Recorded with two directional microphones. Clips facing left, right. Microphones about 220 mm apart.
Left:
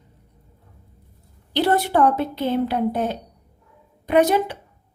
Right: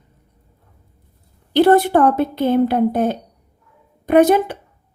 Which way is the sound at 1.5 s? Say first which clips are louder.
Right 7 dB; 50° right (ahead or behind).